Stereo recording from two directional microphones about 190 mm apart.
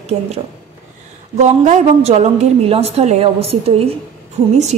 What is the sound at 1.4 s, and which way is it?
A woman's voice, 40° right (ahead or behind).